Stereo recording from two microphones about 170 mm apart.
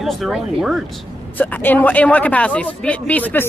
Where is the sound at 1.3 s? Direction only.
10° left (ahead or behind).